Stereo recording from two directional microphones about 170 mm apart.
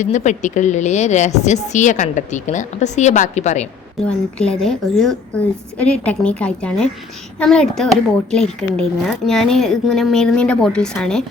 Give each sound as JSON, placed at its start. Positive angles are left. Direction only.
{"t": 0.0, "sound": "speech", "side_deg": 45}
{"t": 4.0, "sound": "a woman's voice", "side_deg": 5}